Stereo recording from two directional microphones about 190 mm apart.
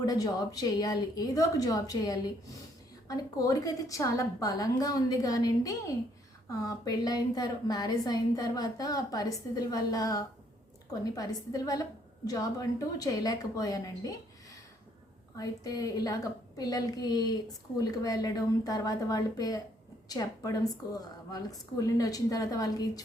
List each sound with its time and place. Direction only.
0.0 s a woman's voice: 20° left (ahead or behind)